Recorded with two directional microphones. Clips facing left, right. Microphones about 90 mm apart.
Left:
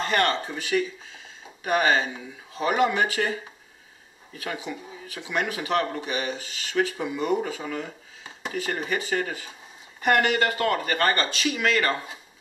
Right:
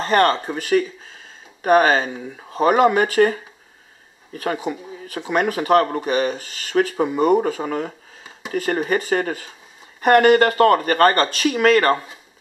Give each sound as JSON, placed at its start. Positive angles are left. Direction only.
{"t": 0.0, "sound": "speech", "side_deg": -40}